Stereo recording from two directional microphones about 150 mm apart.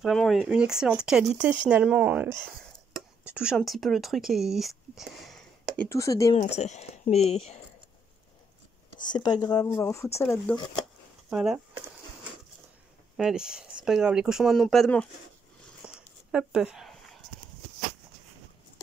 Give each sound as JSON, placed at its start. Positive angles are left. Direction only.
{"t": 0.0, "sound": "speech", "side_deg": 0}
{"t": 5.9, "sound": "speech", "side_deg": 20}
{"t": 6.3, "sound": "speech", "side_deg": 45}
{"t": 8.9, "sound": "speech", "side_deg": 30}
{"t": 11.2, "sound": "speech", "side_deg": -5}
{"t": 13.2, "sound": "speech", "side_deg": -5}
{"t": 15.8, "sound": "a sound", "side_deg": -10}